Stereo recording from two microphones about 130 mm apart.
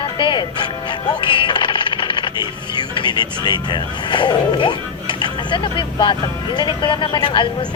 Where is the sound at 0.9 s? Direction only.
35° left (ahead or behind).